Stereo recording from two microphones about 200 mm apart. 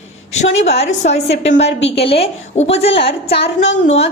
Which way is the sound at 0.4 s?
65° left (ahead or behind).